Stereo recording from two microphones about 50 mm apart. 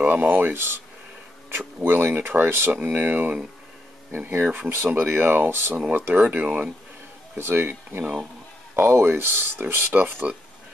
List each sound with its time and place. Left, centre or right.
0.0 s speech: right
1.8 s speech: right
4.5 s speech: right
5.9 s speech: right
7.3 s speech: right
9.9 s speech: right